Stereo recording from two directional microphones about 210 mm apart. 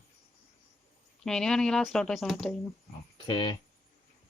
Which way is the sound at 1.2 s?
5° left (ahead or behind).